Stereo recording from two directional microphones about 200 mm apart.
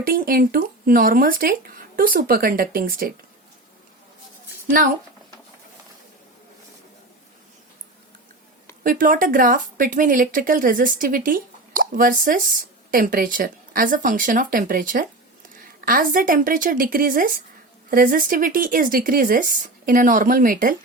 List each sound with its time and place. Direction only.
0.0 s speech: 45° right (ahead or behind)
8.8 s speech: 45° right (ahead or behind)